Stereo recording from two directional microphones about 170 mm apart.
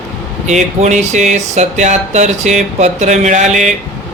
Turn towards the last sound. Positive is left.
turn(degrees=-45)  # may be behind; listen again after turning